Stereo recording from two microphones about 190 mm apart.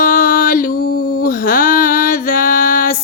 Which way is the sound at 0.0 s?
50° left (ahead or behind).